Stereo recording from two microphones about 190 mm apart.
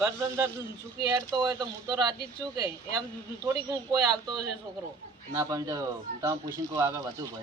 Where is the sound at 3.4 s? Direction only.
20° right (ahead or behind).